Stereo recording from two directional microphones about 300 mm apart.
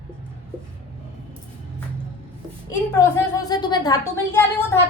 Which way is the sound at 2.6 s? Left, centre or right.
Centre.